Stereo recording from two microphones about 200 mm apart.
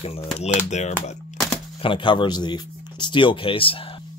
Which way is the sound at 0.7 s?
35° left (ahead or behind).